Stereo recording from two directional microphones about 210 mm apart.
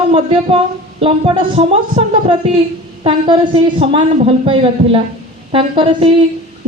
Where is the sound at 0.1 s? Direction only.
25° right (ahead or behind).